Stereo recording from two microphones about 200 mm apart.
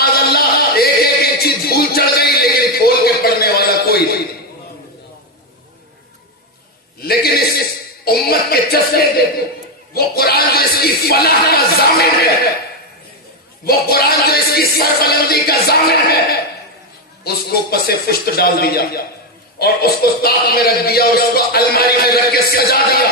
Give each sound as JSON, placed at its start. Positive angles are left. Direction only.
{"t": 0.0, "sound": "music", "side_deg": 50}
{"t": 7.0, "sound": "a sound", "side_deg": 50}
{"t": 13.7, "sound": "speech", "side_deg": 50}
{"t": 17.2, "sound": "speech", "side_deg": 50}